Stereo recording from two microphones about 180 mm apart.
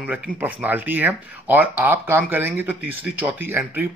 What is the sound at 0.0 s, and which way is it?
Speech, 10° right (ahead or behind).